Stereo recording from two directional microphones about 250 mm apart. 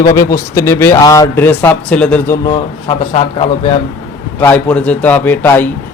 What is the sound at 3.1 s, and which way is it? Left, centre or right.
Speech, left.